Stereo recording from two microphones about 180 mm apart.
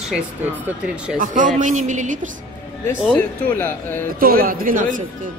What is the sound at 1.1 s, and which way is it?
Speech, 45° right (ahead or behind).